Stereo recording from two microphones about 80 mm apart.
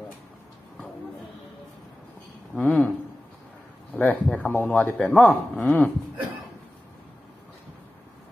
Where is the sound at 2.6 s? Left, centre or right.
Left.